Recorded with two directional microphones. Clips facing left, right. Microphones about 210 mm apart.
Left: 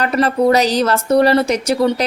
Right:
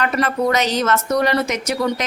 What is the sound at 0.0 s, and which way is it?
A woman's voice, 35° left (ahead or behind).